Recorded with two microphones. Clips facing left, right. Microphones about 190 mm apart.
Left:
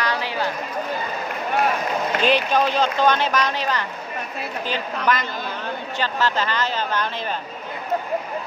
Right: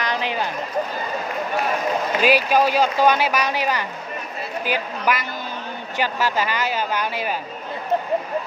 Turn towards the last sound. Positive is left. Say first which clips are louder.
# right 1 dB
turn(degrees=-10)  # may be behind; listen again after turning